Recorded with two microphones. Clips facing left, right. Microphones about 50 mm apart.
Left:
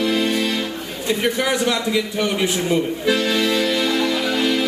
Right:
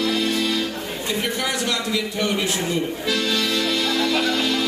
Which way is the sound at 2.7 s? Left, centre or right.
Centre.